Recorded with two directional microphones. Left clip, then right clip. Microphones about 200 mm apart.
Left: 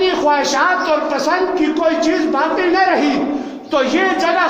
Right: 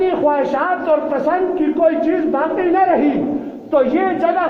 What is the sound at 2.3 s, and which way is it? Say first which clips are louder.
A man's voice: left 1 dB; 35° left (ahead or behind).